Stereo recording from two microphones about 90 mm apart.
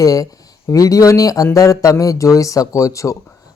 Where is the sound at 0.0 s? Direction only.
40° left (ahead or behind).